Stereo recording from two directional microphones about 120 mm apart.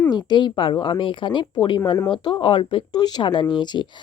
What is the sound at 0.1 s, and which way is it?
A woman's voice, 35° left (ahead or behind).